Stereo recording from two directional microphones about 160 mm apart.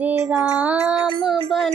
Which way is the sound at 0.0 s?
10° right (ahead or behind).